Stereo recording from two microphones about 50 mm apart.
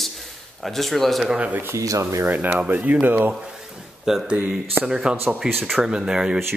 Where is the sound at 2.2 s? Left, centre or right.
Right.